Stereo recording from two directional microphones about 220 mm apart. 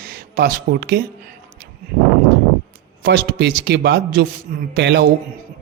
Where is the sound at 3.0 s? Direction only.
50° right (ahead or behind).